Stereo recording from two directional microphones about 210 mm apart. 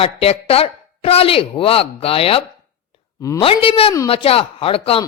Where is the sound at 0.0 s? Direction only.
30° left (ahead or behind).